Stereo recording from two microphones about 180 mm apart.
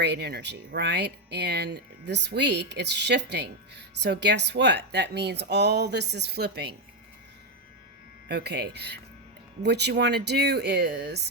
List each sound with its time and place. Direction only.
0.0 s speech: 70° right (ahead or behind)
8.3 s speech: 65° right (ahead or behind)